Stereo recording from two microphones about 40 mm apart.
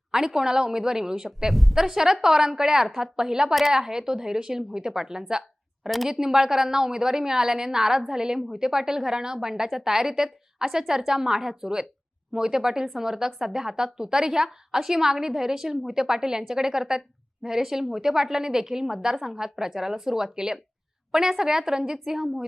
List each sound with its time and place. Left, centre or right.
0.1 s speech: centre
1.5 s a woman's voice: centre
1.8 s speech: centre